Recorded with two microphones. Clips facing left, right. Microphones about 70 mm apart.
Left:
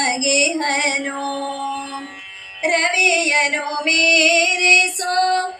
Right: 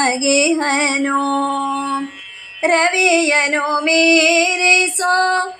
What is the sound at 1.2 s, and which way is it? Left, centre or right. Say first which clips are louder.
Music: right 6 dB; right.